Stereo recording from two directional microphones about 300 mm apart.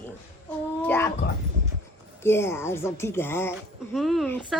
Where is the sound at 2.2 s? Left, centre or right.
Centre.